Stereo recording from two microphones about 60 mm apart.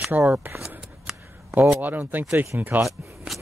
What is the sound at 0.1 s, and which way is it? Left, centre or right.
Speech, right.